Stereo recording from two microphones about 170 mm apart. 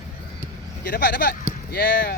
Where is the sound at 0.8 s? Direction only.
55° left (ahead or behind).